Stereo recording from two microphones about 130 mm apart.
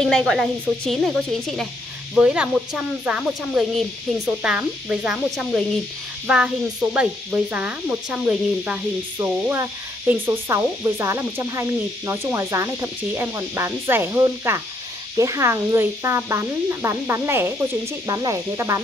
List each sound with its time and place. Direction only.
0.0 s speech: 5° left (ahead or behind)
2.1 s cricket: 10° right (ahead or behind)
5.3 s speech: 5° right (ahead or behind)
6.2 s cricket: 10° right (ahead or behind)
9.2 s speech: 20° right (ahead or behind)